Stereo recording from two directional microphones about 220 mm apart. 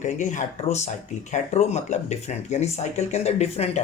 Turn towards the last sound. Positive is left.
turn(degrees=30)  # may be behind; listen again after turning